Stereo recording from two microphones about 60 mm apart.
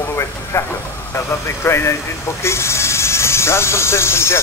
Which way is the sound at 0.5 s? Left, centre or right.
Left.